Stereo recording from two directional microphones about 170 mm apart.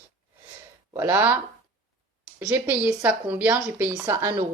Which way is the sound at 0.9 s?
15° right (ahead or behind).